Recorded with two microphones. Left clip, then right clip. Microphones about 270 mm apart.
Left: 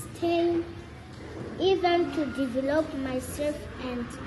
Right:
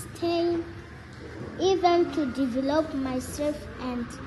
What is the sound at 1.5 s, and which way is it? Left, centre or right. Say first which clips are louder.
A child's voice: right 2 dB; right.